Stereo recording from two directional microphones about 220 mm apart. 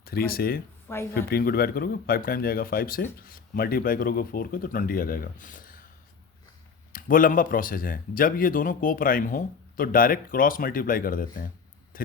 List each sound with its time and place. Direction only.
0.0 s speech: 45° left (ahead or behind)
6.9 s speech: 40° left (ahead or behind)
11.9 s a sound: 40° left (ahead or behind)